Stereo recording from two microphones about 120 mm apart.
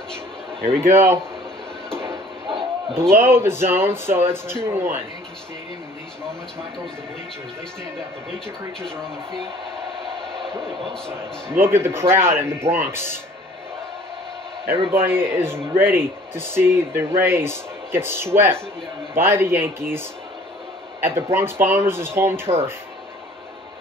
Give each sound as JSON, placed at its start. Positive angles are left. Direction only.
{"t": 0.7, "sound": "speech", "side_deg": -20}
{"t": 3.0, "sound": "speech", "side_deg": -20}
{"t": 11.1, "sound": "speech", "side_deg": -20}
{"t": 14.9, "sound": "speech", "side_deg": -20}
{"t": 21.0, "sound": "speech", "side_deg": -20}